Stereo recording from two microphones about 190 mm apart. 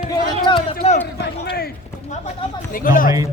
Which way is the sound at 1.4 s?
55° left (ahead or behind).